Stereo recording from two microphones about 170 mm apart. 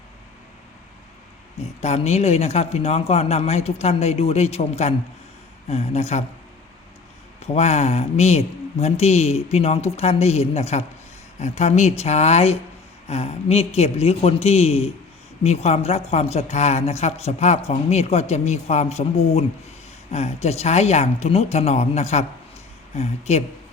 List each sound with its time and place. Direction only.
1.8 s a woman's voice: 40° left (ahead or behind)
7.3 s a woman's voice: 40° left (ahead or behind)